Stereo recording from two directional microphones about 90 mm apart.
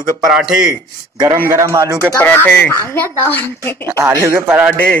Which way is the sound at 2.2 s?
20° left (ahead or behind).